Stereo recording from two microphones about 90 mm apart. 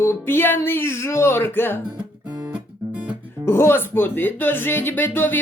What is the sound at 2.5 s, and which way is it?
Guitar, 15° right (ahead or behind).